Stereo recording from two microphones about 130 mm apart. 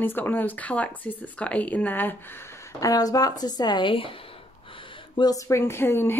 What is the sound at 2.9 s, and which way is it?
A woman's voice, 30° left (ahead or behind).